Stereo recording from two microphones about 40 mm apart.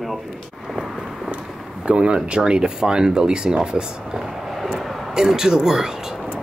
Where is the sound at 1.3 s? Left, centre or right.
Right.